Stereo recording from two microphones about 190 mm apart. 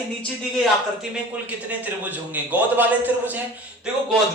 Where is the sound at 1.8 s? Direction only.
10° right (ahead or behind).